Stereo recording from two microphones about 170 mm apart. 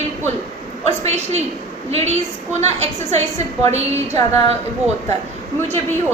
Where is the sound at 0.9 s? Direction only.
40° right (ahead or behind).